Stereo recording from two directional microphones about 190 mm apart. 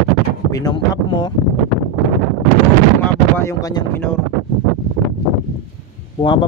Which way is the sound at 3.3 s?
15° left (ahead or behind).